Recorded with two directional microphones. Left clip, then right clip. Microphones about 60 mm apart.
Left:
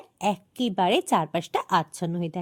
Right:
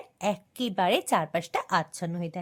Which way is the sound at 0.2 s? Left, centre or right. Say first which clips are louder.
Left 3 dB; left.